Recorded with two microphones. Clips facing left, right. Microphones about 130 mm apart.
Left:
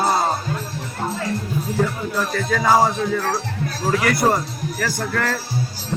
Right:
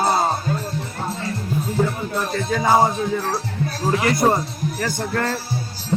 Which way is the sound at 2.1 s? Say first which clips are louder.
Left 2 dB; 25° right (ahead or behind).